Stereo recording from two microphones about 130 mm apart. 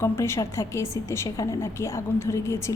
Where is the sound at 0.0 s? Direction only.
20° left (ahead or behind).